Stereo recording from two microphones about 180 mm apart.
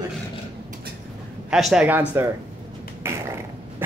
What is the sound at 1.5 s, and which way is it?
Speech, 5° right (ahead or behind).